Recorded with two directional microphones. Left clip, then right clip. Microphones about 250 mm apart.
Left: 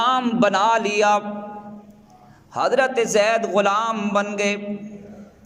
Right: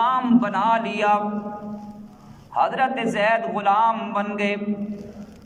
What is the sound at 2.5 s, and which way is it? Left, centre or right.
Speech, left.